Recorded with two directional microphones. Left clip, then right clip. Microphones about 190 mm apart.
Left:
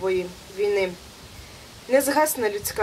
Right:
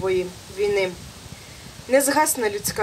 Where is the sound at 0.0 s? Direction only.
25° right (ahead or behind).